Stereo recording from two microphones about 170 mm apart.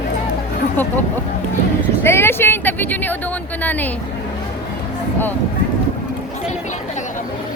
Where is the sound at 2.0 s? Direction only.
15° left (ahead or behind).